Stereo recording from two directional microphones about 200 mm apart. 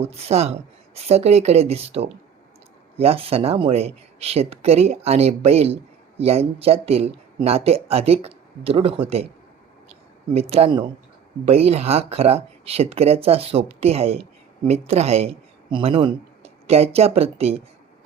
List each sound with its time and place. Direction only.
0.0 s speech: 30° right (ahead or behind)
10.3 s speech: 30° right (ahead or behind)